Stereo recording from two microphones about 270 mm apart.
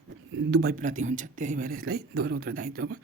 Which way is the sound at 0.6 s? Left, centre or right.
Right.